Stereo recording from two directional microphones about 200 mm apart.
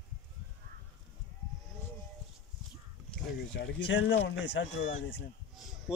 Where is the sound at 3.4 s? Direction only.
60° left (ahead or behind).